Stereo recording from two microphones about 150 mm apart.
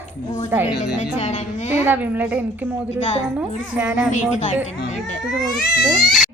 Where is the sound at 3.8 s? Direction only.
10° right (ahead or behind).